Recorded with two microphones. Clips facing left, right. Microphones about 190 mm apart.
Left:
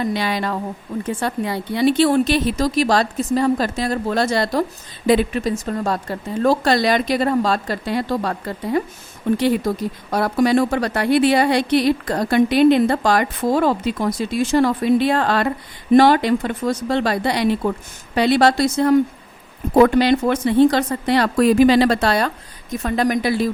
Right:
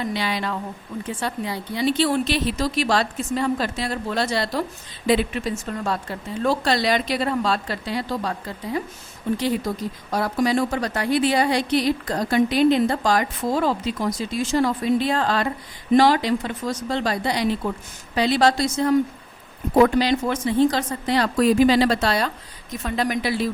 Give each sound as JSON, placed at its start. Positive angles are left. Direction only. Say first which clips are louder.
{"t": 0.0, "sound": "speech", "louder": "left 4 dB", "side_deg": 50}
{"t": 10.1, "sound": "a woman's voice", "louder": "left 5 dB", "side_deg": 65}